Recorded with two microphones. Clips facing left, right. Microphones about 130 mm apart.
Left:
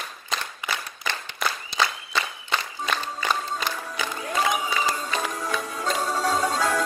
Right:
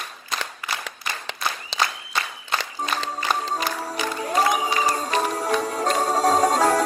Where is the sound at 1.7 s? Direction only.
90° right.